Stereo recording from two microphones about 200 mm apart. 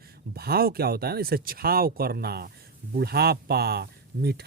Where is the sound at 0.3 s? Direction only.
50° right (ahead or behind).